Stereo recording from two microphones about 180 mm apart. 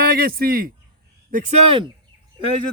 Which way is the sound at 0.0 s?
60° right (ahead or behind).